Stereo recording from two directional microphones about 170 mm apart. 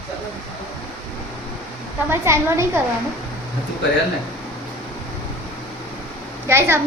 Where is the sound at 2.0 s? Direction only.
15° right (ahead or behind).